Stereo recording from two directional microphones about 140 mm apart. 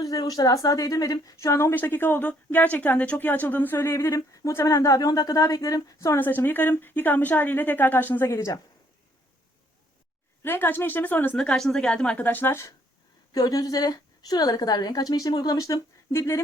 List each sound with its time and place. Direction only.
0.0 s a woman's voice: 25° left (ahead or behind)
10.4 s a woman's voice: 15° left (ahead or behind)
13.3 s a woman's voice: 25° left (ahead or behind)